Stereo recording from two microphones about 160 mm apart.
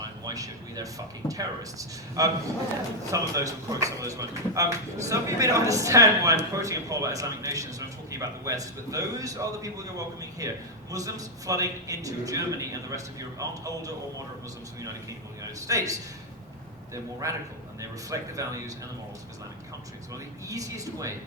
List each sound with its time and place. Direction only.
0.0 s a man's voice: 20° right (ahead or behind)
15.6 s a man's voice: 20° right (ahead or behind)
20.5 s a man's voice: 20° right (ahead or behind)